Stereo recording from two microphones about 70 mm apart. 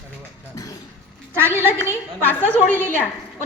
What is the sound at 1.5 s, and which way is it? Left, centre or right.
A woman's voice, left.